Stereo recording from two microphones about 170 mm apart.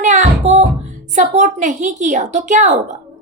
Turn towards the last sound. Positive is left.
turn(degrees=-45)  # may be behind; listen again after turning